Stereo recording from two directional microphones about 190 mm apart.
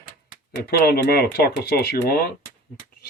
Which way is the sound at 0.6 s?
55° left (ahead or behind).